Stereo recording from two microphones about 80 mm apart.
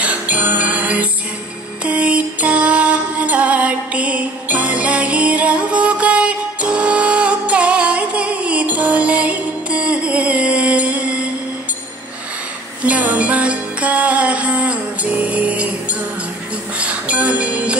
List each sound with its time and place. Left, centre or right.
0.0 s music: centre
12.8 s music: centre